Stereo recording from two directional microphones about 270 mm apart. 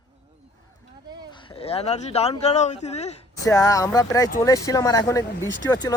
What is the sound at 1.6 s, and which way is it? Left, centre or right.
Speech, left.